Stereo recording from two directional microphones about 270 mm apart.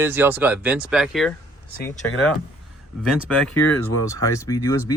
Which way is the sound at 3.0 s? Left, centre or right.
Centre.